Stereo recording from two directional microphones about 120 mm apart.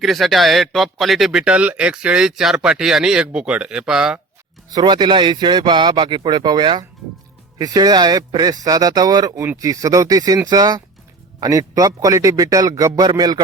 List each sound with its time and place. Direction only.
0.0 s speech: centre (ahead or behind)
4.7 s a man's voice: 35° right (ahead or behind)